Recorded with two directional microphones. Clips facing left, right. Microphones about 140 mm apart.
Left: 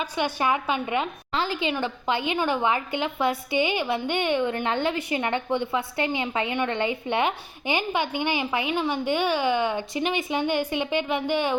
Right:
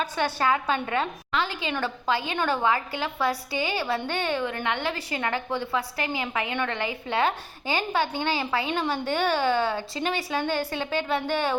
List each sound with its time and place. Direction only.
0.0 s a woman's voice: 15° left (ahead or behind)
1.5 s a woman's voice: 30° right (ahead or behind)
1.7 s a woman's voice: 20° left (ahead or behind)